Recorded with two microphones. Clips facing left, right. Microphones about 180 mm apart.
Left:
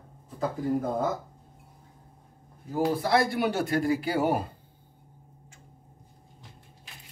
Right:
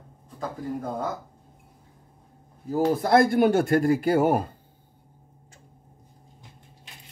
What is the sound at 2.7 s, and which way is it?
Speech, 45° right (ahead or behind).